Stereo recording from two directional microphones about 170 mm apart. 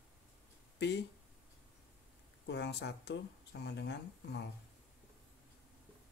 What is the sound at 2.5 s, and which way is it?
Speech, 85° left.